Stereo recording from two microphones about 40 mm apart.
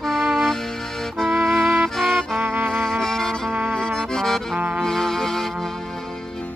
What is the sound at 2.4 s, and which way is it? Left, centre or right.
Music, right.